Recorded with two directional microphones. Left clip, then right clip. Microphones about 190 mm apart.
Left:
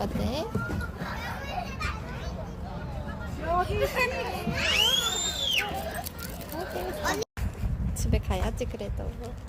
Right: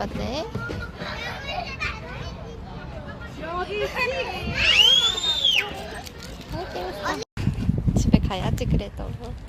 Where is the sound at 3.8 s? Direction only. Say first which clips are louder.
Right 1 dB; 25° left (ahead or behind).